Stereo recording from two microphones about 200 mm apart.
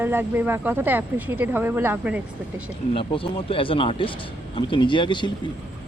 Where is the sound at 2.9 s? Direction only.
25° left (ahead or behind).